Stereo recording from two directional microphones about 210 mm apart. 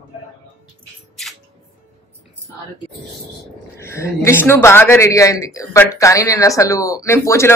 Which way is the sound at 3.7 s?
15° left (ahead or behind).